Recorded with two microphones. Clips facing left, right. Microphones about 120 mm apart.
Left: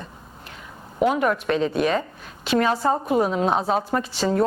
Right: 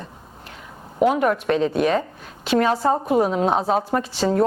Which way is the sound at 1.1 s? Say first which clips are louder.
Right 2 dB; 40° right (ahead or behind).